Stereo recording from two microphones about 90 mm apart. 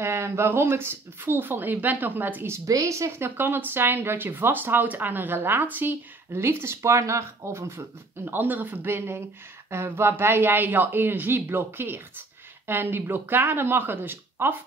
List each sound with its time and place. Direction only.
0.0 s speech: 30° right (ahead or behind)
2.6 s speech: 35° right (ahead or behind)
8.3 s speech: 20° right (ahead or behind)